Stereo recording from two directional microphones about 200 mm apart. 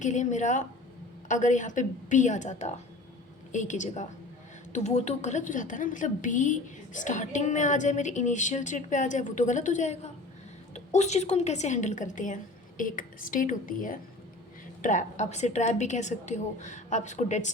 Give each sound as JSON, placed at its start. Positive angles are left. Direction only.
{"t": 0.0, "sound": "a woman's voice", "side_deg": 35}